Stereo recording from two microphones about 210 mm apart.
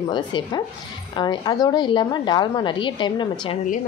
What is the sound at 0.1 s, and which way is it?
A woman's voice, 20° left (ahead or behind).